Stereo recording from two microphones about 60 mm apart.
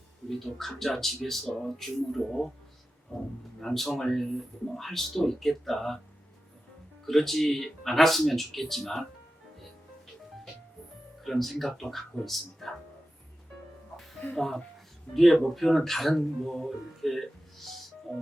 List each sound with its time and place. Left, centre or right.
0.3 s speech: centre
3.1 s speech: left
3.6 s speech: centre
7.0 s speech: centre
11.2 s speech: centre
14.3 s speech: centre